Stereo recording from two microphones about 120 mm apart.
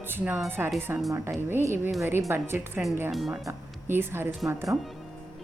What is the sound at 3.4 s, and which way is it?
Speech, 20° right (ahead or behind).